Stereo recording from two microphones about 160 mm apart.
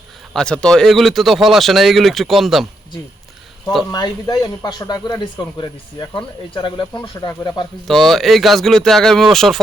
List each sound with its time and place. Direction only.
0.3 s speech: 5° left (ahead or behind)
3.9 s speech: 25° left (ahead or behind)
7.9 s speech: centre (ahead or behind)